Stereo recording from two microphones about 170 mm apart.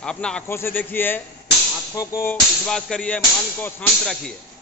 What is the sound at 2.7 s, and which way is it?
Speech, 5° left (ahead or behind).